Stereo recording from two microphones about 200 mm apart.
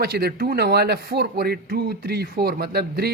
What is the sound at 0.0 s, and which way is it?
Speech, 50° right (ahead or behind).